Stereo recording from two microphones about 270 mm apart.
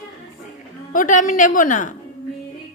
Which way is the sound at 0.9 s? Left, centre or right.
Left.